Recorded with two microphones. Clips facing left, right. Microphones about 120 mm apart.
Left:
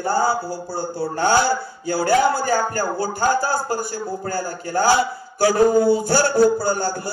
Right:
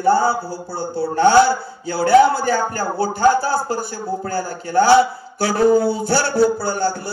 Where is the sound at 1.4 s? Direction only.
45° left (ahead or behind).